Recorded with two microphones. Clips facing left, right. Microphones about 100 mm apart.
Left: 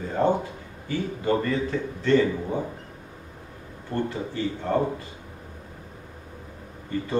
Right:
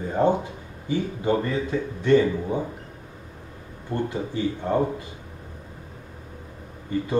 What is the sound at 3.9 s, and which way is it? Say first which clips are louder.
Speech: right 1 dB; 15° right (ahead or behind).